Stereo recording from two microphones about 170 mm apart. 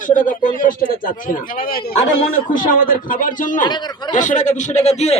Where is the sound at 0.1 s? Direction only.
50° left (ahead or behind).